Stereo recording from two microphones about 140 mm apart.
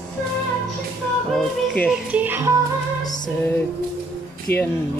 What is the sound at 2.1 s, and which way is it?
Music, 15° right (ahead or behind).